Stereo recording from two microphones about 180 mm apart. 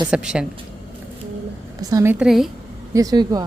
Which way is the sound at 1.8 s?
15° right (ahead or behind).